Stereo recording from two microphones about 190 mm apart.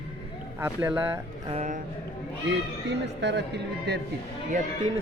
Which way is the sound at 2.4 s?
65° right (ahead or behind).